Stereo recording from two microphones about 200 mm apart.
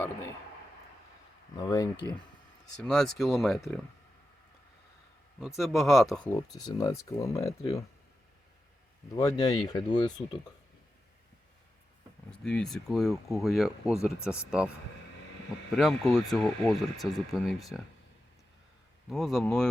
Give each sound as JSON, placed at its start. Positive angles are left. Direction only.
{"t": 1.6, "sound": "speech", "side_deg": 15}
{"t": 2.7, "sound": "speech", "side_deg": 5}
{"t": 5.5, "sound": "speech", "side_deg": 0}
{"t": 6.5, "sound": "speech", "side_deg": 20}
{"t": 9.1, "sound": "speech", "side_deg": 15}
{"t": 12.3, "sound": "speech", "side_deg": 5}
{"t": 15.7, "sound": "speech", "side_deg": 0}
{"t": 19.0, "sound": "speech", "side_deg": 0}